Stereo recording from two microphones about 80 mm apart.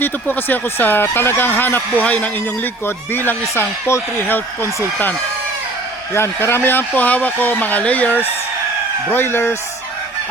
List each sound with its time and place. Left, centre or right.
0.0 s speech: left
6.1 s speech: left